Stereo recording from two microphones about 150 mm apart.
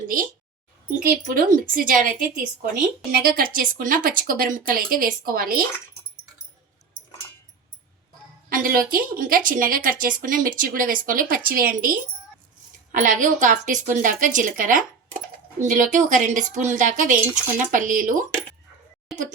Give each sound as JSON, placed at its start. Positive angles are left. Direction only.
{"t": 0.1, "sound": "a woman's voice", "side_deg": -75}
{"t": 8.4, "sound": "a woman's voice", "side_deg": -70}
{"t": 12.9, "sound": "a woman's voice", "side_deg": -60}